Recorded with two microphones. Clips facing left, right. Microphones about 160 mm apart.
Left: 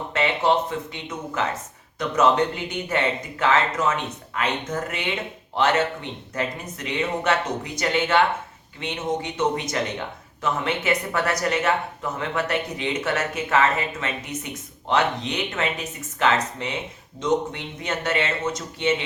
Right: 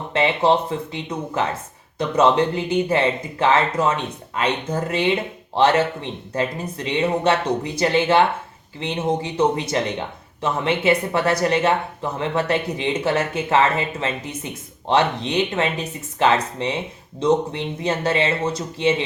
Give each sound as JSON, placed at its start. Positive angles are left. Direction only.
{"t": 0.1, "sound": "speech", "side_deg": -30}